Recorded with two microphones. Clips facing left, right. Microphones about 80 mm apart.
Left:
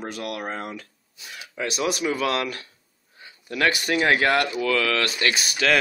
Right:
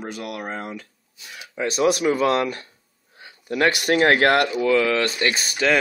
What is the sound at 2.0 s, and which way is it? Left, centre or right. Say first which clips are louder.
Speech: right 5 dB; right.